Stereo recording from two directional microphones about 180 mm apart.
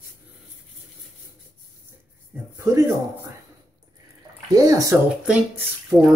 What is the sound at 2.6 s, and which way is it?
Speech, 20° right (ahead or behind).